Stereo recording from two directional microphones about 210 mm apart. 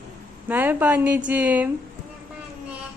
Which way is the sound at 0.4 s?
10° right (ahead or behind).